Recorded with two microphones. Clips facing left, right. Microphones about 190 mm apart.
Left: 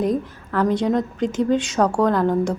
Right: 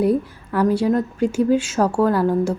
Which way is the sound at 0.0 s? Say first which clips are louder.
Right 3 dB; 10° right (ahead or behind).